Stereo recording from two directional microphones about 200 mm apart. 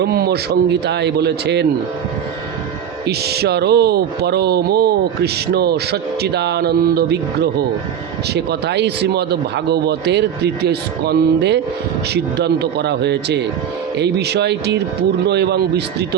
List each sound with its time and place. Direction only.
0.0 s speech: 50° right (ahead or behind)
3.1 s speech: 55° right (ahead or behind)